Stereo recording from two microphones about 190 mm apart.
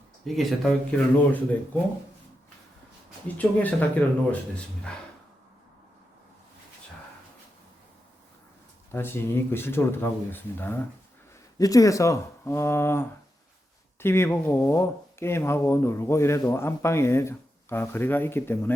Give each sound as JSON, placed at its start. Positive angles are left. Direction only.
{"t": 0.3, "sound": "speech", "side_deg": 0}
{"t": 3.2, "sound": "speech", "side_deg": 10}
{"t": 8.9, "sound": "speech", "side_deg": 10}